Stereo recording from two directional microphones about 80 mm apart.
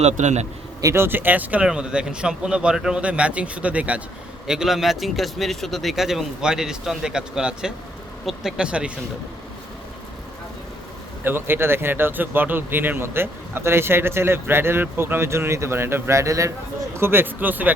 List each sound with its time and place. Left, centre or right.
0.9 s speech: right
4.4 s speech: centre
11.2 s speech: right